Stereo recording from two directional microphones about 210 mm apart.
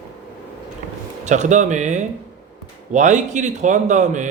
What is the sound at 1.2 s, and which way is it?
A man's voice, 35° right (ahead or behind).